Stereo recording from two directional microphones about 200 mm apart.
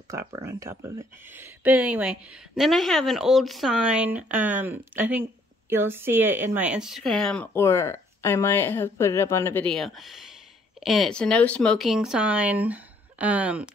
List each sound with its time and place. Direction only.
0.1 s speech: 15° right (ahead or behind); by 7.4 s centre (ahead or behind)
7.5 s speech: 15° left (ahead or behind); by 13.7 s 5° right (ahead or behind)